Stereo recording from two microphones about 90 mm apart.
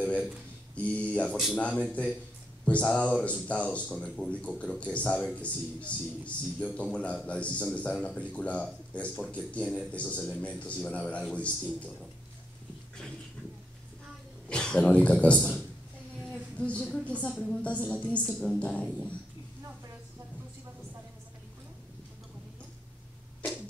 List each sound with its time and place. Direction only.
0.7 s speech: 15° left (ahead or behind)
14.5 s speech: 10° left (ahead or behind)
16.5 s speech: 15° left (ahead or behind)